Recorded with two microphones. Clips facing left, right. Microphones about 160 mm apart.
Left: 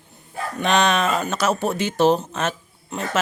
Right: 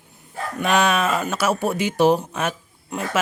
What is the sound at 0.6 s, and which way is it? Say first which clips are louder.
Speech: even; 5° right (ahead or behind).